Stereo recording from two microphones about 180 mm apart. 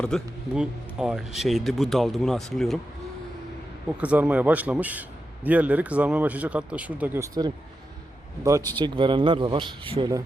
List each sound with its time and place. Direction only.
0.0 s speech: centre (ahead or behind)
3.9 s a man's voice: 5° right (ahead or behind)
8.8 s speech: 25° right (ahead or behind)